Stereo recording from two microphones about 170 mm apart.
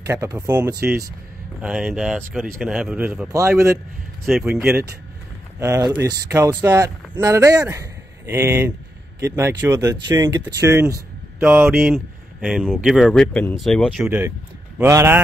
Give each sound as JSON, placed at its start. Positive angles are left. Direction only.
{"t": 0.0, "sound": "speech", "side_deg": -20}
{"t": 3.3, "sound": "speech", "side_deg": -20}
{"t": 4.3, "sound": "speech", "side_deg": -5}
{"t": 5.6, "sound": "speech", "side_deg": -20}
{"t": 14.8, "sound": "speech", "side_deg": -15}